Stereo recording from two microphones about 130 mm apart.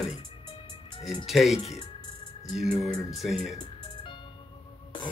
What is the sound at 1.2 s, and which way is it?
Speech, centre (ahead or behind).